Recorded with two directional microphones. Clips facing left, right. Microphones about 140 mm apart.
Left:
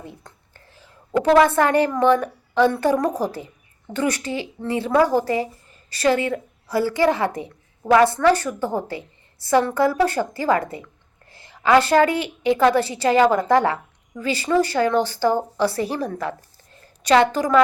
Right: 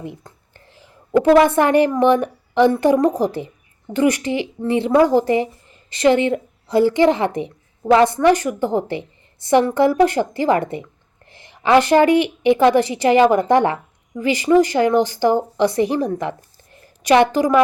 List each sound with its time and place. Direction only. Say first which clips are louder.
0.0 s a woman's voice: right 7 dB; 15° right (ahead or behind)